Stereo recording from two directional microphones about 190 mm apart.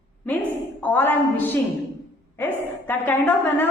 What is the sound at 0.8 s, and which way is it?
A woman's voice, 10° left (ahead or behind).